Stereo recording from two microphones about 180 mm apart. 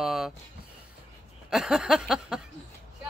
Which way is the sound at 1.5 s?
Centre (ahead or behind).